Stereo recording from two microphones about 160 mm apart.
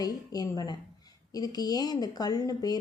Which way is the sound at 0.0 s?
25° left (ahead or behind).